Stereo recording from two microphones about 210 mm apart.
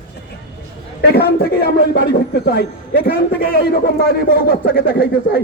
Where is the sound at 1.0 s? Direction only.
50° left (ahead or behind).